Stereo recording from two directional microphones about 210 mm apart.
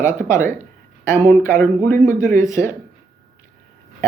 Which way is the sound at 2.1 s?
35° right (ahead or behind).